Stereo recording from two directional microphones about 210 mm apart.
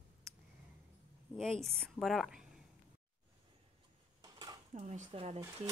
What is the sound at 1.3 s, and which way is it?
A woman's voice, centre (ahead or behind).